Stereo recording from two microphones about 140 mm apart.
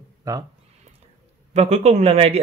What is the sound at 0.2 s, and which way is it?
Speech, 25° right (ahead or behind).